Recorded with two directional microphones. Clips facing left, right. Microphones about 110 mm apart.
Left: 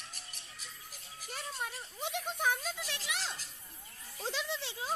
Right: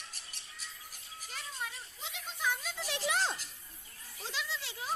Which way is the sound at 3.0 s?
40° right (ahead or behind).